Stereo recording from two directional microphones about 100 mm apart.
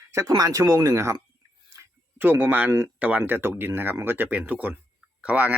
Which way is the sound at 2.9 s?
15° right (ahead or behind).